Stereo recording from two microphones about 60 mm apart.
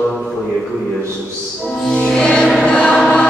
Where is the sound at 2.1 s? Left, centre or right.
Centre.